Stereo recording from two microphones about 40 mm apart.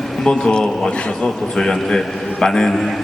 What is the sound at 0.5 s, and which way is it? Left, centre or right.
A man's voice, centre.